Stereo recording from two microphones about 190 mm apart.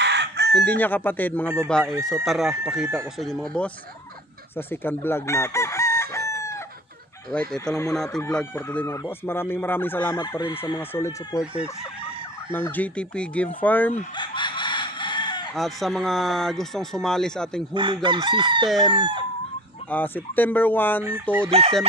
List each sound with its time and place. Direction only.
0.0 s chicken: 60° right (ahead or behind)
0.6 s speech: 10° left (ahead or behind)
4.6 s chicken: 10° left (ahead or behind)
7.2 s speech: 5° left (ahead or behind)
10.2 s fowl: 20° left (ahead or behind)
10.5 s speech: 10° left (ahead or behind)
12.4 s speech: 10° left (ahead or behind)
13.9 s chicken: 25° left (ahead or behind)
15.5 s speech: centre (ahead or behind)
17.7 s chicken: 25° right (ahead or behind)
19.9 s speech: 10° left (ahead or behind)
21.0 s chicken: 10° right (ahead or behind)
21.5 s speech: 30° right (ahead or behind)